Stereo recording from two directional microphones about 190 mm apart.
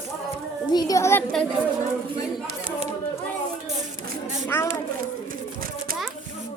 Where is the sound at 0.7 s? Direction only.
20° left (ahead or behind).